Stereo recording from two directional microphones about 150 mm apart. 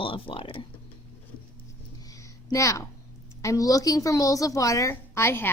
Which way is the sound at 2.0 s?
20° left (ahead or behind).